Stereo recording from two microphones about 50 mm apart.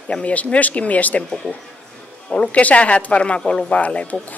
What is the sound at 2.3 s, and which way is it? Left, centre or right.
Speech, left.